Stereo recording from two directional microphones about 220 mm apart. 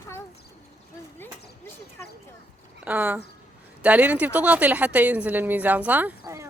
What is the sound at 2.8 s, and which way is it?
A woman's voice, 5° right (ahead or behind).